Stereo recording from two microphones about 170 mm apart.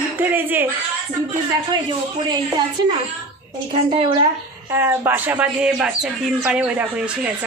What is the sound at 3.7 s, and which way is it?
Speech, 30° right (ahead or behind).